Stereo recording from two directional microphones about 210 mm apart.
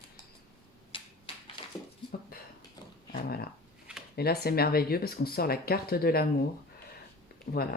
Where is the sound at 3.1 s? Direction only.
45° left (ahead or behind).